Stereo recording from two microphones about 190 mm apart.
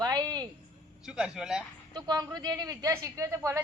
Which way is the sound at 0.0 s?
20° right (ahead or behind).